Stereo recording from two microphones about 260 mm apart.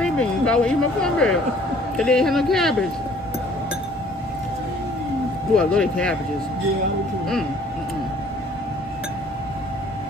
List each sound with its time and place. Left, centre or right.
0.0 s a man's voice: centre
5.6 s a man's voice: centre